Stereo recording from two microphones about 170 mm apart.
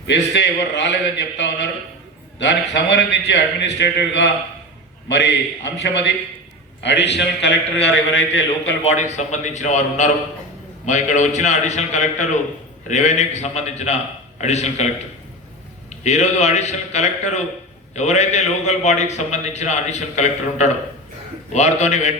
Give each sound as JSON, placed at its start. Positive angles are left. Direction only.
{"t": 0.1, "sound": "a man's voice", "side_deg": 90}
{"t": 8.8, "sound": "a man's voice", "side_deg": 40}